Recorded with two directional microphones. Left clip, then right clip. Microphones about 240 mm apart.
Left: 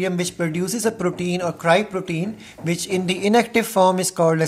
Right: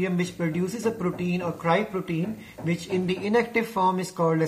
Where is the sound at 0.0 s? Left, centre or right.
Left.